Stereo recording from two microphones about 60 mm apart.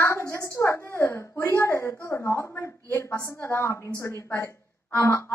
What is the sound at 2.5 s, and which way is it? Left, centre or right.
Speech, left.